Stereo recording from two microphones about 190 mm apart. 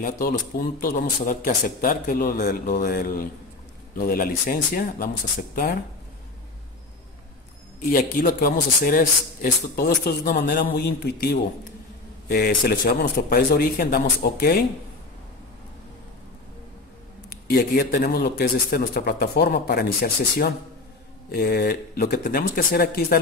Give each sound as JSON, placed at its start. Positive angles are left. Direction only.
{"t": 0.0, "sound": "a man's voice", "side_deg": 45}
{"t": 7.9, "sound": "a man's voice", "side_deg": 50}
{"t": 17.5, "sound": "a man's voice", "side_deg": 55}